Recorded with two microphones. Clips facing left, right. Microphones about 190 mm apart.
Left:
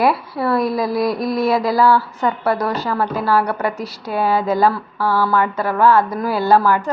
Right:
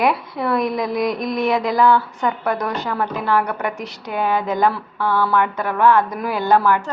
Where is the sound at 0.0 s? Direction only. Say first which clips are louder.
Left 2 dB; 5° left (ahead or behind).